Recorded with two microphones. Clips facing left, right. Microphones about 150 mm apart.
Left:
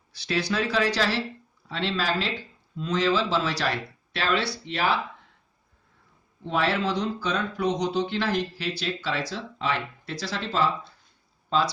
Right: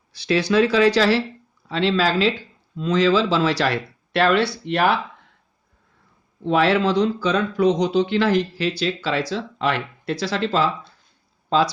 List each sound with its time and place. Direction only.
0.1 s speech: 90° right
4.1 s speech: 60° right (ahead or behind)
6.4 s speech: 85° right